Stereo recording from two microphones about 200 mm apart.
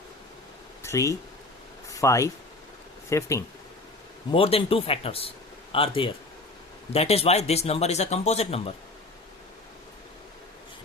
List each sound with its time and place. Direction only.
0.8 s a sound: 15° left (ahead or behind)
1.9 s speech: 15° left (ahead or behind)
4.3 s speech: 30° left (ahead or behind)